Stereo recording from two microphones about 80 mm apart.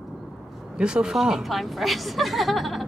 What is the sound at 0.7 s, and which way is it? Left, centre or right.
A woman's voice, centre.